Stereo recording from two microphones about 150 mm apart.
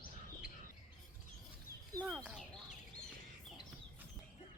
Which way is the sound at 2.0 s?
Centre (ahead or behind).